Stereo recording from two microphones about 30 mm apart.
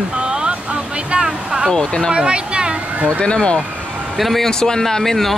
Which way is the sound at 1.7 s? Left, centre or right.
Left.